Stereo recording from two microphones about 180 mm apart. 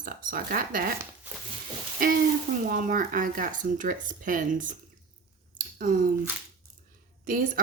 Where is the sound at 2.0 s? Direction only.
50° right (ahead or behind).